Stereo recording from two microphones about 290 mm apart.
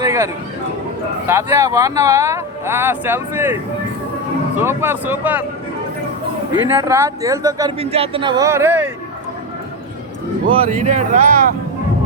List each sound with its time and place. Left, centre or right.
0.0 s a sound: centre
1.3 s speech: centre
4.6 s speech: centre
6.5 s speech: centre
10.4 s speech: right